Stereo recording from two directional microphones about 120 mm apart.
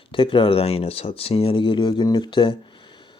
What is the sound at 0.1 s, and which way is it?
Speech, 45° left (ahead or behind).